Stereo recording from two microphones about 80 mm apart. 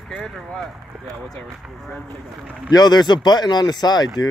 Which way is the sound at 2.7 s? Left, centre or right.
Left.